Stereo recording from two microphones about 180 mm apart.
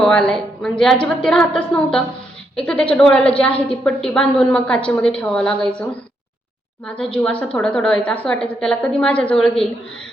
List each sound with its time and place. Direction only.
0.0 s a woman's voice: 5° left (ahead or behind)